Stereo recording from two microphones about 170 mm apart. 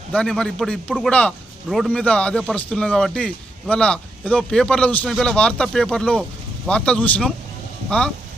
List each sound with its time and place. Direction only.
0.1 s speech: 5° left (ahead or behind)